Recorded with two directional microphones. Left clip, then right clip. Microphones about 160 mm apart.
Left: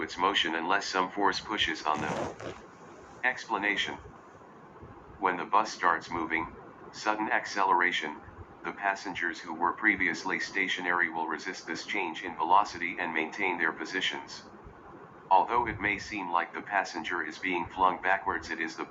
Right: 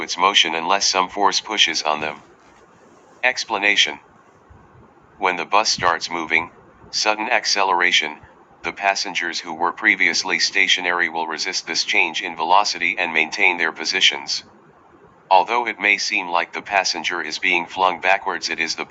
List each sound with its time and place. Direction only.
0.0 s speech: 85° right
3.2 s speech: 90° right
5.2 s speech: 90° right
15.3 s speech: 90° right